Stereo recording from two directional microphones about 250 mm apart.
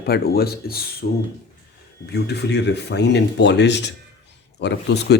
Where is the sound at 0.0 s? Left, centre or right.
Left.